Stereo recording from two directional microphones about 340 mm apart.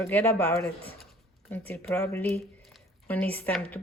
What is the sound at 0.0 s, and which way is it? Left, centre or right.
A woman's voice, centre.